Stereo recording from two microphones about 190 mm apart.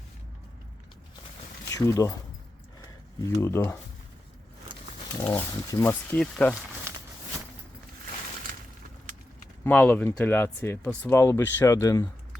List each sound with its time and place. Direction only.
1.7 s speech: 15° left (ahead or behind)
3.2 s speech: 15° left (ahead or behind)
5.1 s speech: 15° left (ahead or behind)
6.9 s a sound: 15° right (ahead or behind)
9.6 s speech: 10° left (ahead or behind)